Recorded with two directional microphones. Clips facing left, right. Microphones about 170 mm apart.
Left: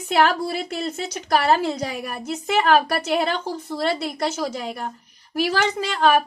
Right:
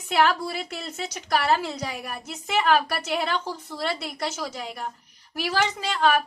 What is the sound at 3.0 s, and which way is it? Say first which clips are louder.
A woman's voice: left 4 dB; 30° left (ahead or behind).